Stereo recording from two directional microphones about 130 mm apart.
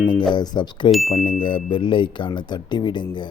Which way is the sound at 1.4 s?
40° left (ahead or behind).